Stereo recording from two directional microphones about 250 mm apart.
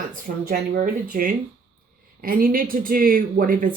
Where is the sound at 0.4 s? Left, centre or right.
Right.